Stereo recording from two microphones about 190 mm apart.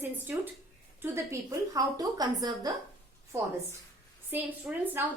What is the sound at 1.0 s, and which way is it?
A woman's voice, 15° right (ahead or behind).